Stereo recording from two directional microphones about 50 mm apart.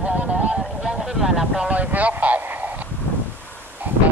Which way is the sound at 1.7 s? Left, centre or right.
Right.